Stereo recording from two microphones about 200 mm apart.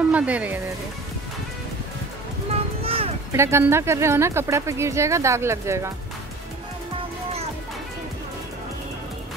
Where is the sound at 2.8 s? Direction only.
30° right (ahead or behind).